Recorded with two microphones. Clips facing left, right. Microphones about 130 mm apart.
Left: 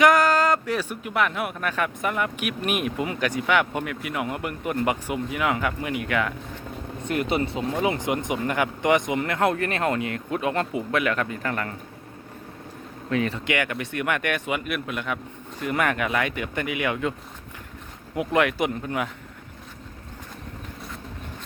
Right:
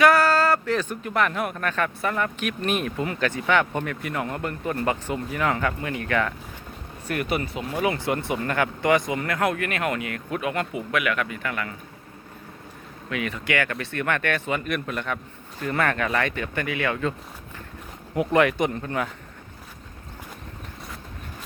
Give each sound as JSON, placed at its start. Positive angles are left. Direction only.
{"t": 0.0, "sound": "speech", "side_deg": 15}
{"t": 7.0, "sound": "speech", "side_deg": 25}
{"t": 13.1, "sound": "speech", "side_deg": 30}
{"t": 13.5, "sound": "speech", "side_deg": 20}
{"t": 18.1, "sound": "speech", "side_deg": 0}